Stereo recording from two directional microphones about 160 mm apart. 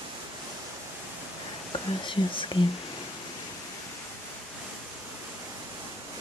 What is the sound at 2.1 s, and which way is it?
Speech, 30° left (ahead or behind).